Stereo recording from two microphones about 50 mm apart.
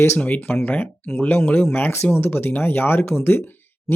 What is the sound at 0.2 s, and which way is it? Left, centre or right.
Speech, left.